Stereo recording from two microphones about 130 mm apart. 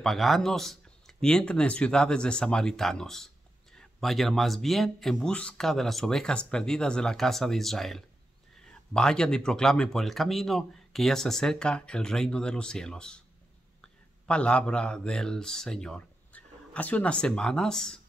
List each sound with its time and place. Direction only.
0.0 s speech: centre (ahead or behind)